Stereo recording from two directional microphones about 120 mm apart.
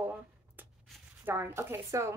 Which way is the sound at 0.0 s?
15° right (ahead or behind).